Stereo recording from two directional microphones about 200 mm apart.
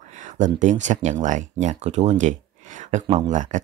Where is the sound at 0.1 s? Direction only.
40° right (ahead or behind).